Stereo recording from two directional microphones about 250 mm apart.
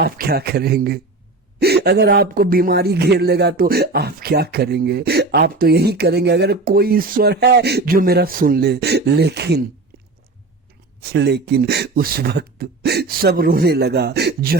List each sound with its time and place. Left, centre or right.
0.0 s speech: right
11.1 s speech: right